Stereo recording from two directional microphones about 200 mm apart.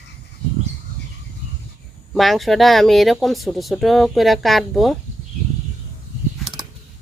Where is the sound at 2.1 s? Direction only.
Centre (ahead or behind).